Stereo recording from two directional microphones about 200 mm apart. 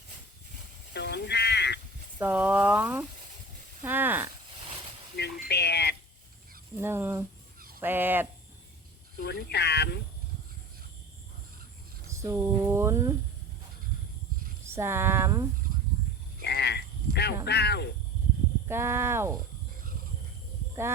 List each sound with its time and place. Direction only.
0.9 s a sound: 55° left (ahead or behind)
2.1 s speech: 10° right (ahead or behind)
3.8 s snake: 10° right (ahead or behind)
5.1 s a sound: 55° left (ahead or behind)
6.7 s speech: 10° right (ahead or behind)
9.1 s speech: 55° left (ahead or behind)
12.0 s speech: 15° right (ahead or behind)
14.6 s speech: 15° right (ahead or behind)
16.4 s a sound: 55° left (ahead or behind)
18.7 s speech: 10° right (ahead or behind)